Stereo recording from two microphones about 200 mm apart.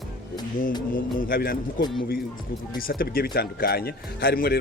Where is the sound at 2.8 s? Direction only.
45° left (ahead or behind).